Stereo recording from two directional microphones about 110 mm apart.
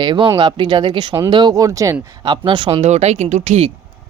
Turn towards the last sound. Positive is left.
turn(degrees=-90)